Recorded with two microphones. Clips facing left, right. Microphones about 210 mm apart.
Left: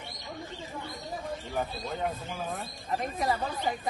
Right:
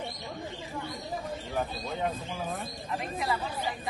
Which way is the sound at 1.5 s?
Centre (ahead or behind).